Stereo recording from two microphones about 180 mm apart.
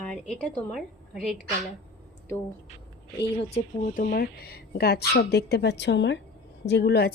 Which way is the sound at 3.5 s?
40° left (ahead or behind).